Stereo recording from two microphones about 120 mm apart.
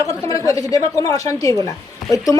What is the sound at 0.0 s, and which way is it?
A woman's voice, 25° left (ahead or behind).